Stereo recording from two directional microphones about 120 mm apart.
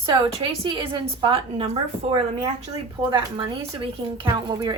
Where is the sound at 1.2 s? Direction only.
50° right (ahead or behind).